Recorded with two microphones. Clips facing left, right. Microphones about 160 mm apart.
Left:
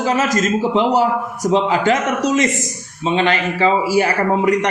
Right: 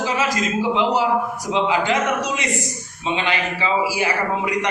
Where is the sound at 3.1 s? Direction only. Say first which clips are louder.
Left 7 dB; 45° left (ahead or behind).